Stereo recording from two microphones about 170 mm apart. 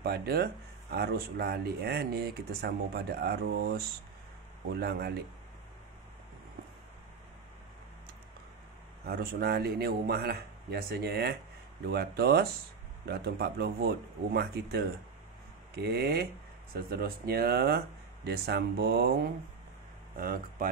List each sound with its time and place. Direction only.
0.0 s speech: 70° right (ahead or behind)
9.0 s speech: 65° right (ahead or behind)
20.2 s speech: 60° right (ahead or behind)